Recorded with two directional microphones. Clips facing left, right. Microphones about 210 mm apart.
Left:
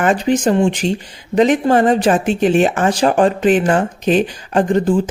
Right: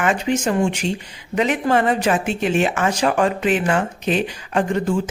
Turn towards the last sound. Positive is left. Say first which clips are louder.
# left 5 dB
turn(degrees=35)  # may be behind; listen again after turning